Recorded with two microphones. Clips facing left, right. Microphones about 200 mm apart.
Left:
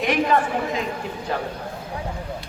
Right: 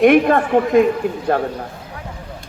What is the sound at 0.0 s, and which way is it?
Speech, 55° right (ahead or behind).